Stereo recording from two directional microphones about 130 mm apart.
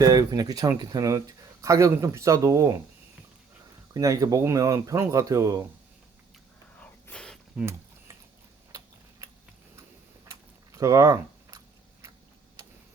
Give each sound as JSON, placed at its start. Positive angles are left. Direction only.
{"t": 0.0, "sound": "speech", "side_deg": -30}
{"t": 3.9, "sound": "speech", "side_deg": -25}
{"t": 7.1, "sound": "a sound", "side_deg": 5}
{"t": 7.6, "sound": "typing", "side_deg": -20}
{"t": 8.7, "sound": "tick-tock", "side_deg": -25}
{"t": 10.7, "sound": "a sound", "side_deg": -25}